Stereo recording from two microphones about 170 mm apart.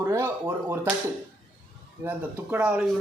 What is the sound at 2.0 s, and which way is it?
Speech, 10° right (ahead or behind).